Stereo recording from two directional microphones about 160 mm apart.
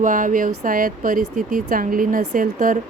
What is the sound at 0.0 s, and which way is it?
Speech, 55° right (ahead or behind).